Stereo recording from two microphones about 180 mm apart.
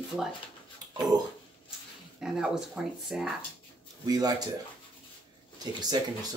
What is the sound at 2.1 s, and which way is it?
A woman's voice, 5° right (ahead or behind).